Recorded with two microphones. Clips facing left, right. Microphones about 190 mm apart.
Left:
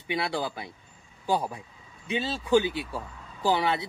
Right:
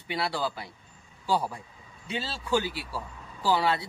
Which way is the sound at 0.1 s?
20° left (ahead or behind).